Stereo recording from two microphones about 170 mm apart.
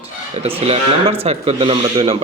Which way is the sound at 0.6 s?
35° right (ahead or behind).